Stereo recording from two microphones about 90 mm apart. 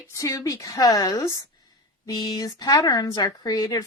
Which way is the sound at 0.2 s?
40° left (ahead or behind).